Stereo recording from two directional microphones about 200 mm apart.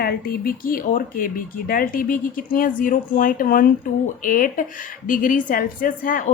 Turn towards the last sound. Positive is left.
turn(degrees=45)  # may be behind; listen again after turning